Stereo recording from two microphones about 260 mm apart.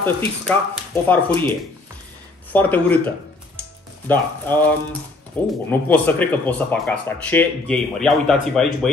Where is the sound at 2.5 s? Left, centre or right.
Centre.